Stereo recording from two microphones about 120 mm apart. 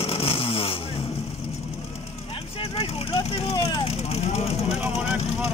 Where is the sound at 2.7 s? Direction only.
55° left (ahead or behind).